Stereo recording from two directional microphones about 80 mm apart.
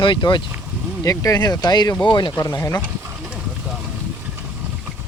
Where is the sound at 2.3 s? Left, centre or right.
Left.